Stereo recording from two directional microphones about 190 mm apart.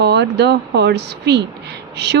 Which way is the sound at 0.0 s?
60° right (ahead or behind).